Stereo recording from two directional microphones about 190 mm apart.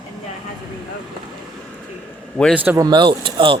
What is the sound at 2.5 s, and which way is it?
Speech, 10° right (ahead or behind).